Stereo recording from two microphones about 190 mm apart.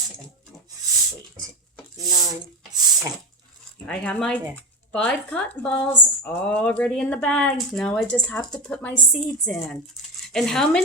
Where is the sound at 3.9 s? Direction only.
5° left (ahead or behind).